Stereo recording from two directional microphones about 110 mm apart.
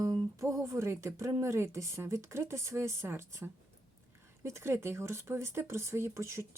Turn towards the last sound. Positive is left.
turn(degrees=-25)  # may be behind; listen again after turning